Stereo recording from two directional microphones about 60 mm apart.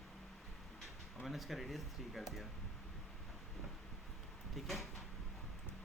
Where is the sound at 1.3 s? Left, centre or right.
Centre.